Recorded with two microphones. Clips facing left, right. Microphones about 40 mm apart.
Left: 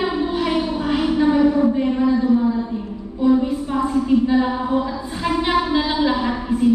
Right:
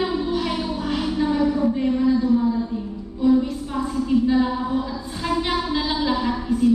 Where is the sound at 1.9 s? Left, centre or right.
Left.